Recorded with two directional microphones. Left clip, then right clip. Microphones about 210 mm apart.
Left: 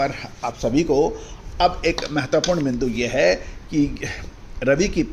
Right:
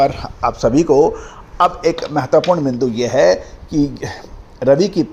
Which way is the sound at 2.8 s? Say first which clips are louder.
Right 5 dB; 20° right (ahead or behind).